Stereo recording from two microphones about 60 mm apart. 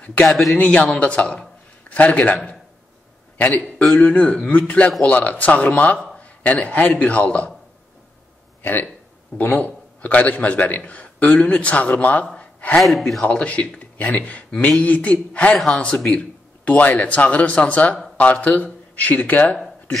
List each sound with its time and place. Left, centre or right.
0.0 s speech: left
0.3 s speech: centre
0.6 s speech: left
6.1 s a sound: left
7.0 s speech: left
9.4 s speech: left
12.4 s gasp: left
12.8 s speech: centre
13.2 s speech: centre